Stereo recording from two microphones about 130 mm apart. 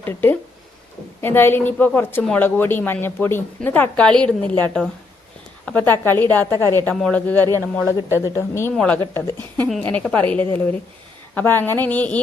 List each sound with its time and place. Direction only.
0.0 s speech: 15° left (ahead or behind)
6.9 s speech: 10° left (ahead or behind)
8.7 s speech: 10° left (ahead or behind)